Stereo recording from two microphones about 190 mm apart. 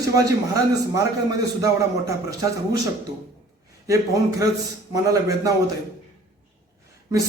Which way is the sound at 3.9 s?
15° right (ahead or behind).